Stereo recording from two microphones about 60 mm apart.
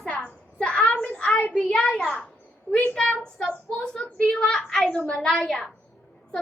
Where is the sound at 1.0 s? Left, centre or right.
Left.